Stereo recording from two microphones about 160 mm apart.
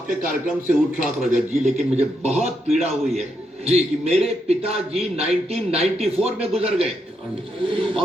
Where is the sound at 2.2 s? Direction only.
45° right (ahead or behind).